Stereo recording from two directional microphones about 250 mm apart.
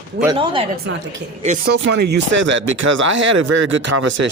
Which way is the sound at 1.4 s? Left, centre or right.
Right.